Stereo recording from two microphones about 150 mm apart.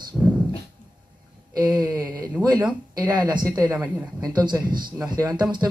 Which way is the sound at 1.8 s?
25° right (ahead or behind).